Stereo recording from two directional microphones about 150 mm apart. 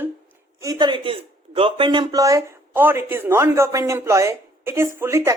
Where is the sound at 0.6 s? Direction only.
25° right (ahead or behind).